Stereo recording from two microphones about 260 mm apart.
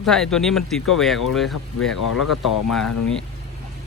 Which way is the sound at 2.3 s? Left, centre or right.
Left.